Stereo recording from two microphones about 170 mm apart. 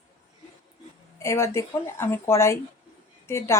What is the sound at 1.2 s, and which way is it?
Speech, 15° left (ahead or behind).